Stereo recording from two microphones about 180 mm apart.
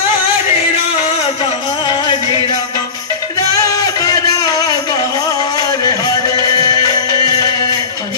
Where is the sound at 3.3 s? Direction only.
20° left (ahead or behind).